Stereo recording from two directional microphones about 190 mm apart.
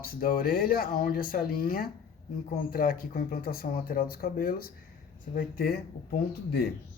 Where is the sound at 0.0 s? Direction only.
50° left (ahead or behind).